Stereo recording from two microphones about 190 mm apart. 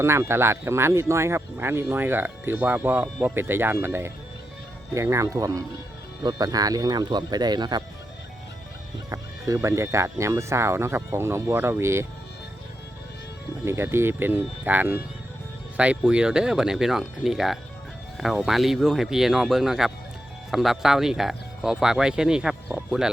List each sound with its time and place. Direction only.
0.0 s speech: 15° right (ahead or behind)
9.0 s speech: 15° right (ahead or behind)
13.7 s speech: 15° right (ahead or behind)